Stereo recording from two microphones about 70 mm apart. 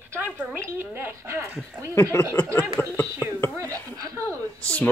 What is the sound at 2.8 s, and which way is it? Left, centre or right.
Speech, left.